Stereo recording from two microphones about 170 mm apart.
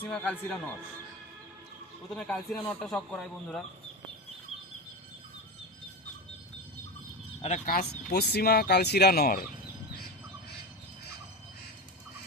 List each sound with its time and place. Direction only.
0.0 s a man's voice: 10° left (ahead or behind)
2.1 s speech: centre (ahead or behind)
7.4 s speech: 45° left (ahead or behind); by 9.4 s 60° left (ahead or behind)